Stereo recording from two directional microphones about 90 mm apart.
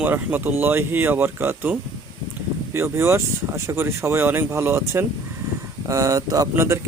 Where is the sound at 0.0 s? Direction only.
20° right (ahead or behind).